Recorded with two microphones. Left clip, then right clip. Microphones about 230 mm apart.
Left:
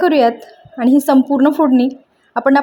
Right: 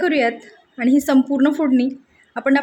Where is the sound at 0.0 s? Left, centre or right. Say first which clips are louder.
Left 6 dB; centre.